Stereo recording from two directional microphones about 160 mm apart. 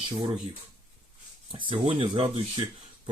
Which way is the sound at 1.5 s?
30° right (ahead or behind).